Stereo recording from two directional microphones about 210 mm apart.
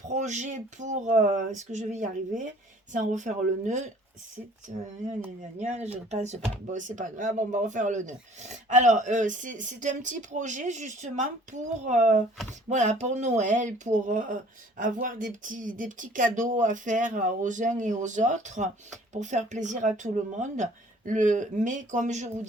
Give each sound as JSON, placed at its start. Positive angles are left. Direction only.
{"t": 0.1, "sound": "speech", "side_deg": -35}